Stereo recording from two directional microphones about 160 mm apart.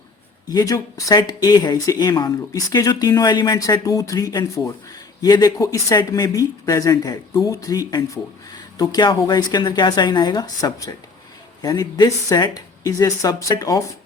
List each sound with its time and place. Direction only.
0.4 s speech: 20° left (ahead or behind)